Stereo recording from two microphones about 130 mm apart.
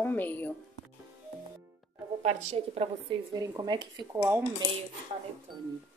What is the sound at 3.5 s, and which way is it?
Speech, 35° right (ahead or behind).